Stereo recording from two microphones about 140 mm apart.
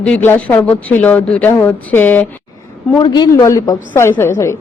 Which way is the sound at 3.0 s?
30° left (ahead or behind).